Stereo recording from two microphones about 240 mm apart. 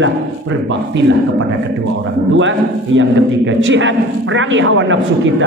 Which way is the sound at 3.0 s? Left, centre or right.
Right.